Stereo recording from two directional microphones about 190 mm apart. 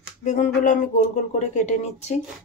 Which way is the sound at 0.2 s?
40° left (ahead or behind).